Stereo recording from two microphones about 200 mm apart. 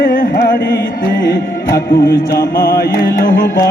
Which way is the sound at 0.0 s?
45° left (ahead or behind).